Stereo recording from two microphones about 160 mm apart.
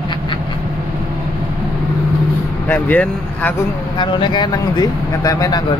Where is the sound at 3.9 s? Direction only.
30° left (ahead or behind).